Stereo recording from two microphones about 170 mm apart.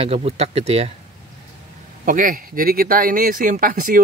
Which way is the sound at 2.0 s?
50° right (ahead or behind).